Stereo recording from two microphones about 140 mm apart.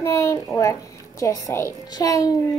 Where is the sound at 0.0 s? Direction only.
20° left (ahead or behind).